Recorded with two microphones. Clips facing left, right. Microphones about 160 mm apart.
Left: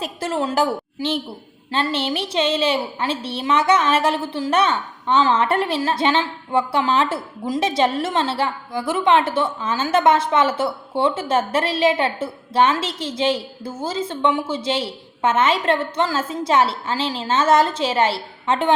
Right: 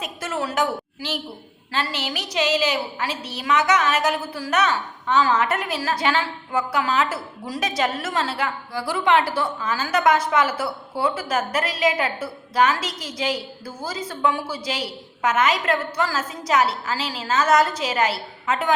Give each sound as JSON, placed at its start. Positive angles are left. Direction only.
{"t": 0.0, "sound": "a woman's voice", "side_deg": 30}